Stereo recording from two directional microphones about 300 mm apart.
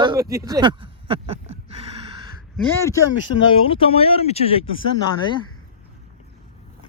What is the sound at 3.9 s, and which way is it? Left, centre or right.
Speech, centre.